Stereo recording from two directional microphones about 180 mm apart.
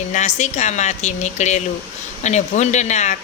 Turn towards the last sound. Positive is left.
turn(degrees=40)  # may be behind; listen again after turning